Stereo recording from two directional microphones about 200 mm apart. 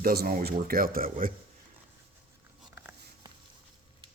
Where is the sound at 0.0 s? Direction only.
50° right (ahead or behind).